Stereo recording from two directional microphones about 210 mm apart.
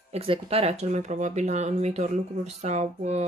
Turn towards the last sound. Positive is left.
turn(degrees=-30)  # may be behind; listen again after turning